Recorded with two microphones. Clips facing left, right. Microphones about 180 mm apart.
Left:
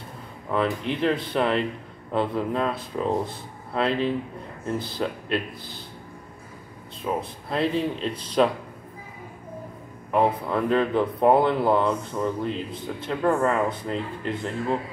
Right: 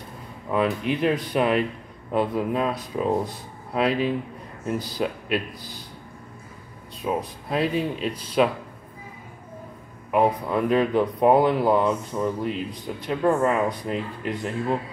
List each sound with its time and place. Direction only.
0.5 s speech: 15° right (ahead or behind)
3.7 s speech: 10° right (ahead or behind)
7.0 s speech: 15° right (ahead or behind)
10.1 s speech: 10° right (ahead or behind)